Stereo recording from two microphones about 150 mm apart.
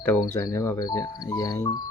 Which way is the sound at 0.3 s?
20° left (ahead or behind).